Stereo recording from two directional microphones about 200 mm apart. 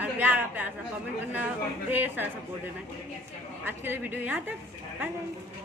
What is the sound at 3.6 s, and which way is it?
Speech, 10° right (ahead or behind).